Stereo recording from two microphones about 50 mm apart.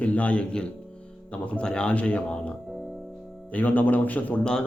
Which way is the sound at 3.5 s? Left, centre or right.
Left.